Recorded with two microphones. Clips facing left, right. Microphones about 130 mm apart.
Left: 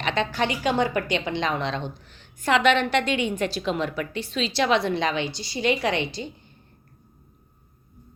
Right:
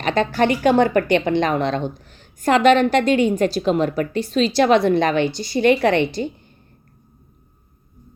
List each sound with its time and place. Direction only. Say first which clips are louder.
0.0 s a woman's voice: right 7 dB; 45° right (ahead or behind)